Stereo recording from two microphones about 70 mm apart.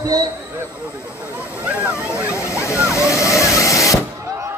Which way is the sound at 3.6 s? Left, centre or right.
Left.